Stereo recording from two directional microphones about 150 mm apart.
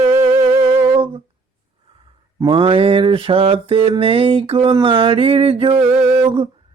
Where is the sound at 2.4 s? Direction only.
35° right (ahead or behind).